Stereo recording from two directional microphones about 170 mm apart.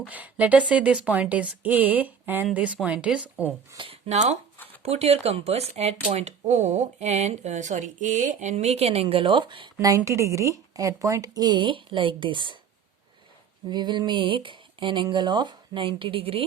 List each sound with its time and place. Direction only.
0.0 s a woman's voice: 10° right (ahead or behind)
3.8 s speech: 35° right (ahead or behind)
9.7 s speech: 15° right (ahead or behind)
13.7 s speech: 25° right (ahead or behind)